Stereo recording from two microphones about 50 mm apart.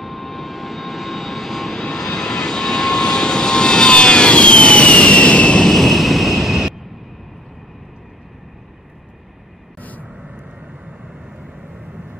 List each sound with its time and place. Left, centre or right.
0.0 s vehicle: centre; by 5.6 s left
5.6 s a sound: centre
9.8 s vehicle: left